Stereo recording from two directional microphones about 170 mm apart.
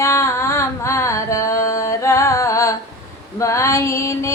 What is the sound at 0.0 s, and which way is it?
Music, 15° left (ahead or behind).